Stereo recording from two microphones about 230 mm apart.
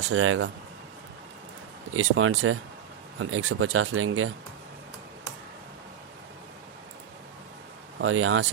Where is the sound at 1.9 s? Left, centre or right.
Right.